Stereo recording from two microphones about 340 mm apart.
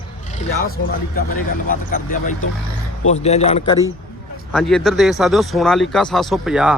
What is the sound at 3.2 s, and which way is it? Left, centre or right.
Speech, centre.